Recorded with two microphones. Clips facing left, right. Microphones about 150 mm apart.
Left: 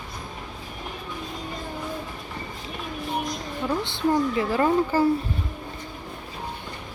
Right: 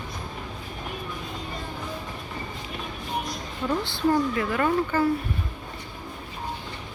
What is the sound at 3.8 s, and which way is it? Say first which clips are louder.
A woman's voice: even; 20° left (ahead or behind).